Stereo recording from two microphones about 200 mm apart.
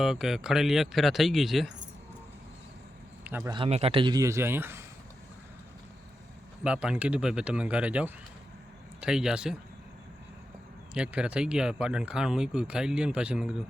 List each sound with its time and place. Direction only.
0.0 s speech: centre (ahead or behind)
3.2 s speech: 10° right (ahead or behind)
3.5 s speech: 30° right (ahead or behind); by 4.8 s 10° right (ahead or behind)
6.7 s speech: 5° right (ahead or behind)
10.9 s speech: 5° right (ahead or behind)